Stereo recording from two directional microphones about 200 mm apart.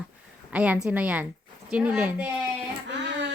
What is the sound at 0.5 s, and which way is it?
A woman's voice, 5° right (ahead or behind).